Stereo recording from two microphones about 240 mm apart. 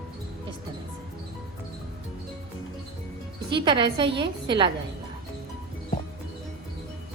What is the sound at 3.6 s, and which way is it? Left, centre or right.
Speech, centre.